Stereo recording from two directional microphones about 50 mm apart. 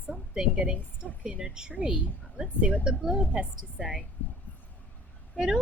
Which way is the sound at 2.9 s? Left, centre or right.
Centre.